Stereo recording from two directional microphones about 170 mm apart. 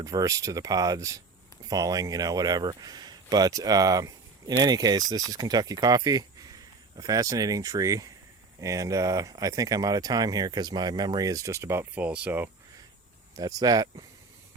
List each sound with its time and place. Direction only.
0.0 s speech: 20° right (ahead or behind)
13.3 s speech: 20° right (ahead or behind)